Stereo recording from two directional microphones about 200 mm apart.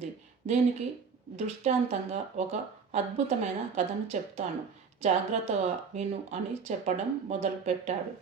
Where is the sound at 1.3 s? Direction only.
35° right (ahead or behind).